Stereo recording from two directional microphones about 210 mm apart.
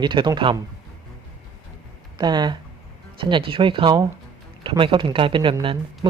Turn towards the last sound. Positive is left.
turn(degrees=-25)  # may be behind; listen again after turning